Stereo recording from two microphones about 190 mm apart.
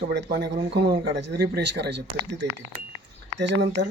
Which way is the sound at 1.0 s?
65° right (ahead or behind).